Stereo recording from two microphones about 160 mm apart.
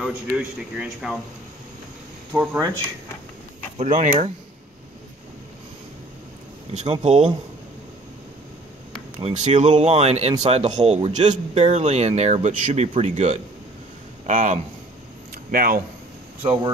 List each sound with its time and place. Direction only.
0.0 s speech: 5° right (ahead or behind)
2.3 s speech: 10° right (ahead or behind)
3.7 s speech: 50° right (ahead or behind)
7.0 s speech: 45° right (ahead or behind)
9.2 s speech: 45° right (ahead or behind)
15.5 s speech: 65° right (ahead or behind)
16.4 s speech: 40° right (ahead or behind)